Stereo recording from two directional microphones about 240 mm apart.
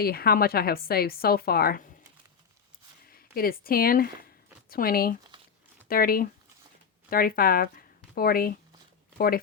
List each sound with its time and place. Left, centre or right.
0.0 s speech: left
3.1 s speech: left